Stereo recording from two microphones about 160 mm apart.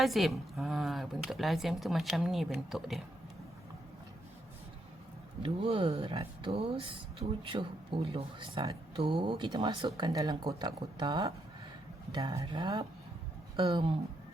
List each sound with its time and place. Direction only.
0.0 s speech: centre (ahead or behind)
5.4 s speech: 35° right (ahead or behind)